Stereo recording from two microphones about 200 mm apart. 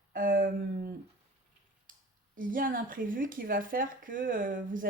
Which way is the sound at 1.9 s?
45° right (ahead or behind).